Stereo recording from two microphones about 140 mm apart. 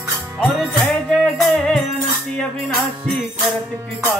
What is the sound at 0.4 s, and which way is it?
Music, 10° left (ahead or behind).